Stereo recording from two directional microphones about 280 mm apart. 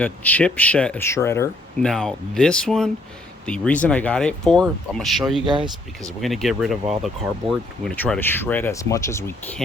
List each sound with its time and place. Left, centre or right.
0.0 s speech: centre
5.5 s speech: centre
6.1 s speech: centre